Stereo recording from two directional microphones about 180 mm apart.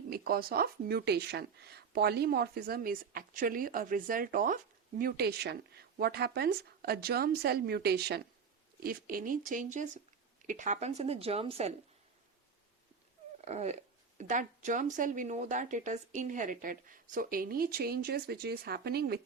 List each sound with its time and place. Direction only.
0.1 s a woman's voice: 55° right (ahead or behind); by 11.7 s 35° right (ahead or behind)
13.4 s dog: 40° right (ahead or behind)
14.2 s a woman's voice: 45° right (ahead or behind); by 19.2 s 60° right (ahead or behind)